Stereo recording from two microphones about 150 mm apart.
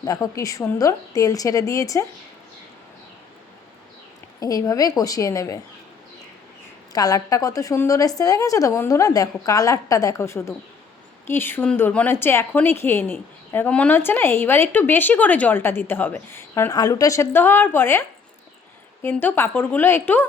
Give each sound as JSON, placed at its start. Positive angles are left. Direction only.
{"t": 0.0, "sound": "a woman's voice", "side_deg": 25}
{"t": 4.4, "sound": "a woman's voice", "side_deg": 25}
{"t": 6.9, "sound": "a woman's voice", "side_deg": 25}
{"t": 19.0, "sound": "a woman's voice", "side_deg": 15}